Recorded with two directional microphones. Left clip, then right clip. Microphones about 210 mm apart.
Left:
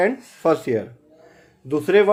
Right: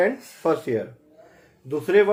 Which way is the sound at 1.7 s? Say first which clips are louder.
Left 2 dB; 50° left (ahead or behind).